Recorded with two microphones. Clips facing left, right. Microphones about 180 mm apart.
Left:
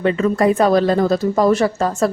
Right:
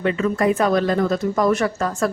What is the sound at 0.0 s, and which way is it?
Speech, 35° left (ahead or behind).